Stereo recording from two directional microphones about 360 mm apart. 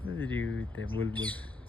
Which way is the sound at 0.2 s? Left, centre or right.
Centre.